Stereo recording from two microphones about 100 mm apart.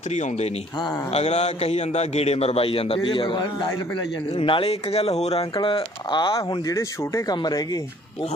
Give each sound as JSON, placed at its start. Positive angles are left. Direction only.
{"t": 1.1, "sound": "a man's voice", "side_deg": 90}
{"t": 4.4, "sound": "a man's voice", "side_deg": 65}
{"t": 5.5, "sound": "speech", "side_deg": 55}
{"t": 6.7, "sound": "speech", "side_deg": 30}